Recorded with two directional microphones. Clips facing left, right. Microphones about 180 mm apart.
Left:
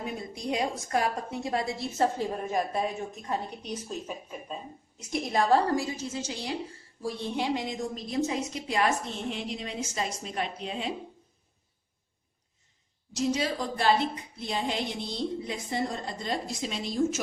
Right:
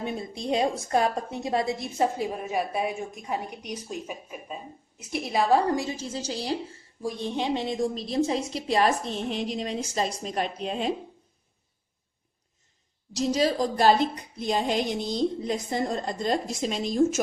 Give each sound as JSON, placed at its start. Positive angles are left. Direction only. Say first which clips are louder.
{"t": 0.0, "sound": "a woman's voice", "louder": "right 3 dB", "side_deg": -30}
{"t": 5.7, "sound": "a woman's voice", "louder": "right 1 dB", "side_deg": -30}
{"t": 7.0, "sound": "a woman's voice", "louder": "right 2 dB", "side_deg": -15}
{"t": 13.1, "sound": "a woman's voice", "louder": "right 4 dB", "side_deg": -35}